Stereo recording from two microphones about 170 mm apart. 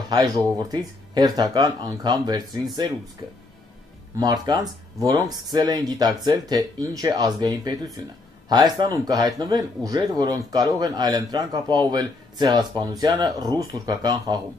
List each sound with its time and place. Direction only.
0.1 s a man's voice: 25° right (ahead or behind)
4.2 s a man's voice: 25° right (ahead or behind)